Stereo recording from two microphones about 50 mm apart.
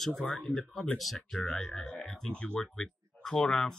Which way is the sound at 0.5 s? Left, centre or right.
Centre.